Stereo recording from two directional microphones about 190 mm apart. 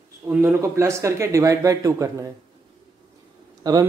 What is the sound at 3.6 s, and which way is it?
Speech, 20° right (ahead or behind).